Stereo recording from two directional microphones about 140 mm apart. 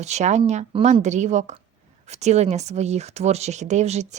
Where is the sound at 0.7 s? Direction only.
45° right (ahead or behind).